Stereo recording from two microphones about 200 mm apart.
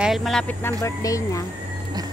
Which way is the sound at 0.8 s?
15° left (ahead or behind).